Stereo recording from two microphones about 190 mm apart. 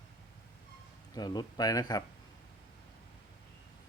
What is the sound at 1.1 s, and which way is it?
Speech, 20° left (ahead or behind).